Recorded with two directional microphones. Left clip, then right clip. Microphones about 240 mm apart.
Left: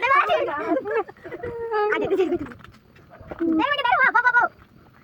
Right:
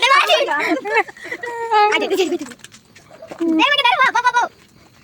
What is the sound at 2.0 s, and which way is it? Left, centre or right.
Speech, right.